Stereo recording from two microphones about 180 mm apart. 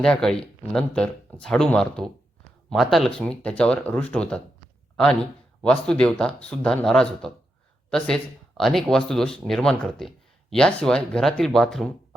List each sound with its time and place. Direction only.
0.0 s speech: 5° left (ahead or behind)
5.6 s speech: 5° left (ahead or behind)